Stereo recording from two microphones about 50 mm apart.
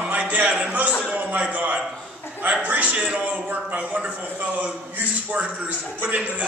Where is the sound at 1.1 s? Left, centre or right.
Right.